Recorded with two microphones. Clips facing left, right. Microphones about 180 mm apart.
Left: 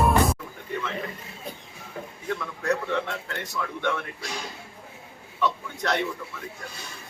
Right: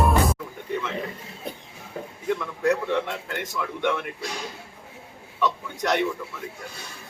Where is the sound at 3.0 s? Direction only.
20° right (ahead or behind).